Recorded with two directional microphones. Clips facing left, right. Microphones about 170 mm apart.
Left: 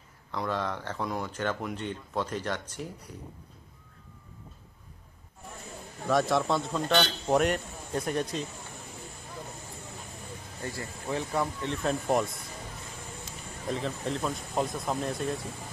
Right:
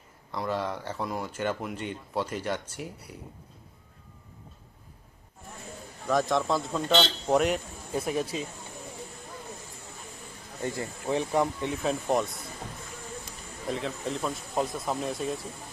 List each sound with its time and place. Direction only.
0.3 s speech: 5° right (ahead or behind)
6.0 s speech: centre (ahead or behind)
10.6 s speech: 20° right (ahead or behind)
11.7 s speech: centre (ahead or behind)
13.7 s speech: centre (ahead or behind)